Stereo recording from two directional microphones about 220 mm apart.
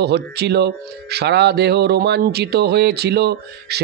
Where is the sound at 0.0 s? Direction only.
50° right (ahead or behind).